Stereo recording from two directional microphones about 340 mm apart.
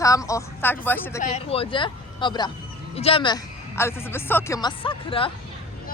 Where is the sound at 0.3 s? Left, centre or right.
Centre.